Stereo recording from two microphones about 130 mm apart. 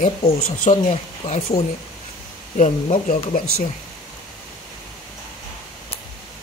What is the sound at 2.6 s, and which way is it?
Speech, 75° left (ahead or behind).